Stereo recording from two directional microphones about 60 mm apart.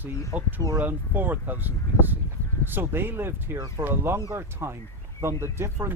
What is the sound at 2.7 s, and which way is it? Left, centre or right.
Speech, right.